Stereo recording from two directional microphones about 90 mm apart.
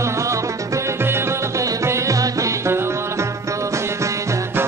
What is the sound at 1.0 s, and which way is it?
Music, 30° right (ahead or behind).